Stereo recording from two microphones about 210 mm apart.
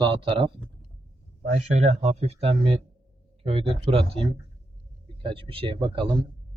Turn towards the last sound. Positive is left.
turn(degrees=-20)  # may be behind; listen again after turning